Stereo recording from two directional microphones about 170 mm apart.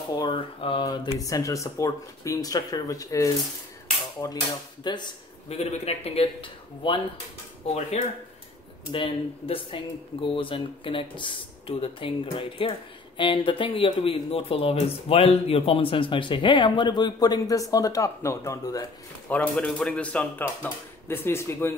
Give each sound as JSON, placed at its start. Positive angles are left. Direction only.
{"t": 0.1, "sound": "speech", "side_deg": 25}
{"t": 4.8, "sound": "speech", "side_deg": 25}
{"t": 19.2, "sound": "speech", "side_deg": 10}